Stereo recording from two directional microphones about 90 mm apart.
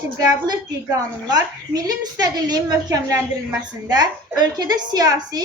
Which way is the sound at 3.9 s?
50° right (ahead or behind).